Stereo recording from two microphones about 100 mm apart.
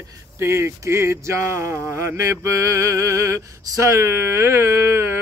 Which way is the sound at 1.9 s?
25° right (ahead or behind).